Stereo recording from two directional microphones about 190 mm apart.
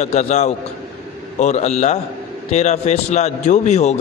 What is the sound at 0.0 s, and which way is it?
A man's voice, 35° left (ahead or behind).